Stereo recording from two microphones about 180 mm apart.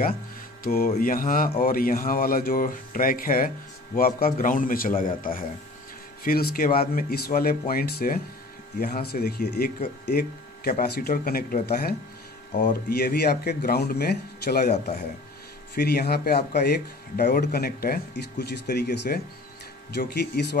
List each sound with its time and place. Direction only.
0.7 s speech: 55° left (ahead or behind)
12.9 s speech: 60° left (ahead or behind)
14.7 s speech: 40° left (ahead or behind)
15.7 s speech: 60° left (ahead or behind)